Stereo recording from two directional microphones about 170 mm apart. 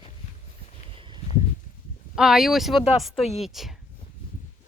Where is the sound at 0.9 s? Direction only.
30° right (ahead or behind).